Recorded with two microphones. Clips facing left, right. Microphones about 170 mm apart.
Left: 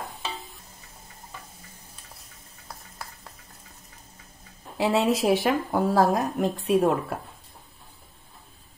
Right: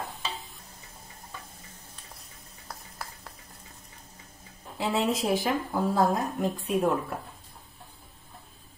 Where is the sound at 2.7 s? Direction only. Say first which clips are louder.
Even; centre (ahead or behind).